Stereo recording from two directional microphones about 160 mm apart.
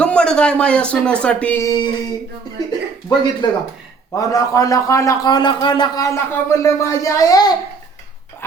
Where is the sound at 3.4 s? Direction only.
25° left (ahead or behind).